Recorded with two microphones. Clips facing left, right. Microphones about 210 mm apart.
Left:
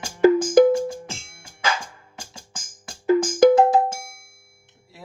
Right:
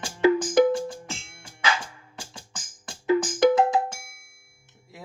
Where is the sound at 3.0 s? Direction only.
45° left (ahead or behind).